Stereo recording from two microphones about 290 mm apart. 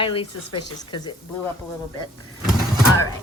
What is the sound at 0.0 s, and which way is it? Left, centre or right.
Speech, centre.